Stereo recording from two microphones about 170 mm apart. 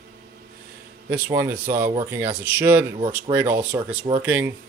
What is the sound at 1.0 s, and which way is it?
Speech, 10° right (ahead or behind).